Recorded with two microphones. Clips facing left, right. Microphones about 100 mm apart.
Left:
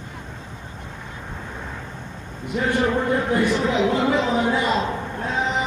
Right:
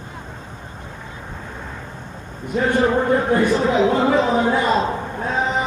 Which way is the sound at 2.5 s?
40° right (ahead or behind).